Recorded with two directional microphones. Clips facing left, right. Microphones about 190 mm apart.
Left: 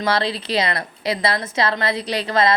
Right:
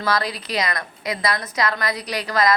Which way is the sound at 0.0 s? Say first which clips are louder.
Left 3 dB; 25° left (ahead or behind).